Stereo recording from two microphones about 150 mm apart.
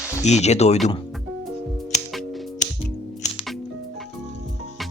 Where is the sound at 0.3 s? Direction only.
50° left (ahead or behind).